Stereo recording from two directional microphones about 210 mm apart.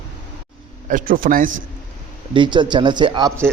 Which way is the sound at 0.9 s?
40° right (ahead or behind).